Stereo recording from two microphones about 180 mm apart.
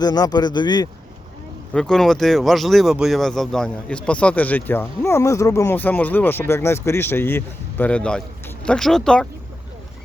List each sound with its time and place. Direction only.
0.0 s speech: 20° left (ahead or behind)
1.7 s speech: 5° left (ahead or behind)